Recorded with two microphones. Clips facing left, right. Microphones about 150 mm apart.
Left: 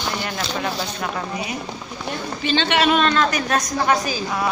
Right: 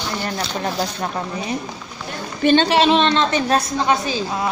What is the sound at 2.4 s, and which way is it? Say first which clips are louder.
Speech: right 8 dB; 50° right (ahead or behind).